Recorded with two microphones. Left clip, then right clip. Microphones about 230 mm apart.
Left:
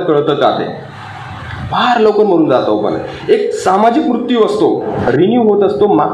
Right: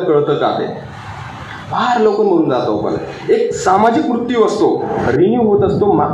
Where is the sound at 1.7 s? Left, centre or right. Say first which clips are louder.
Left 3 dB; left.